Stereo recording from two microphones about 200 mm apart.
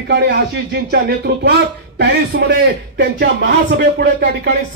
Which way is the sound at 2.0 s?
55° right (ahead or behind).